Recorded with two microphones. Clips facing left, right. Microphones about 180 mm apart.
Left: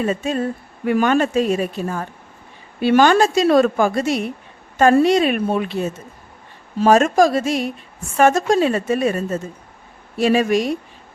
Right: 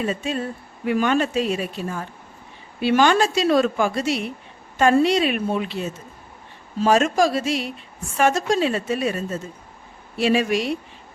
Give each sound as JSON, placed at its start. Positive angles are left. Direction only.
{"t": 0.0, "sound": "a woman's voice", "side_deg": 45}